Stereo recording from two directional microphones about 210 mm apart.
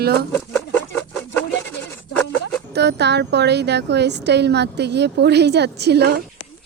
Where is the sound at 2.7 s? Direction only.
50° right (ahead or behind).